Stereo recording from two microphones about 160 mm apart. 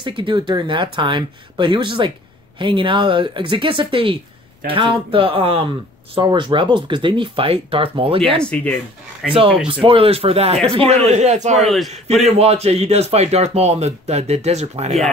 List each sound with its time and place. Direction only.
0.0 s speech: 30° right (ahead or behind)
8.4 s speech: 5° left (ahead or behind)
9.3 s a man's voice: 35° right (ahead or behind)
11.6 s a man's voice: centre (ahead or behind)
11.9 s speech: 40° right (ahead or behind)